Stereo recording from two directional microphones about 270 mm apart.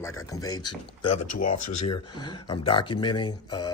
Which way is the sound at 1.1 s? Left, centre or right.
Left.